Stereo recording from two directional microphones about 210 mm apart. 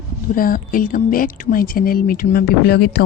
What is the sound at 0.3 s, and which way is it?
Speech, 40° left (ahead or behind).